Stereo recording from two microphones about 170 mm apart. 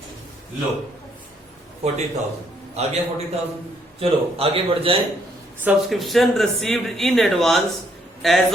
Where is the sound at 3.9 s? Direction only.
35° right (ahead or behind).